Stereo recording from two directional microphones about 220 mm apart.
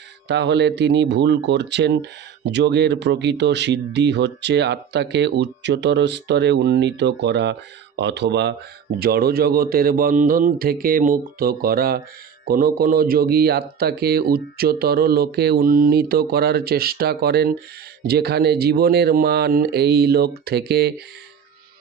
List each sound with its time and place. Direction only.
0.3 s speech: 50° right (ahead or behind)